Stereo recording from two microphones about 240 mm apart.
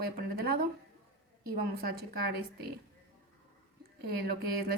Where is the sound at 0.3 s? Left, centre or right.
Right.